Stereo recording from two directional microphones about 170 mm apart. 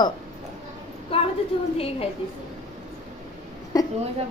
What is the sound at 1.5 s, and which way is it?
Speech, 30° left (ahead or behind).